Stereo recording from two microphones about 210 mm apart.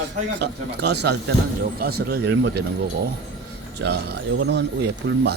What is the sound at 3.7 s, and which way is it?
Speech, 55° right (ahead or behind).